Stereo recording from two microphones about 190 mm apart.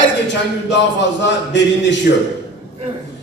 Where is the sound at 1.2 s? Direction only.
70° left (ahead or behind).